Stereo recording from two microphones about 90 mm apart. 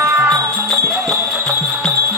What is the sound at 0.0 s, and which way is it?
Music, 30° right (ahead or behind).